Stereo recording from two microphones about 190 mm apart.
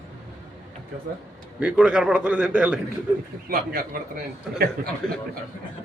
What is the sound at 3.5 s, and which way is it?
Speech, 50° right (ahead or behind).